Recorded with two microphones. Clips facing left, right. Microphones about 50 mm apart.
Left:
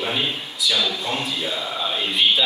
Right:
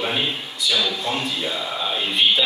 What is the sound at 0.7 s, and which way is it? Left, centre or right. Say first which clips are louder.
Speech: right 1 dB; centre.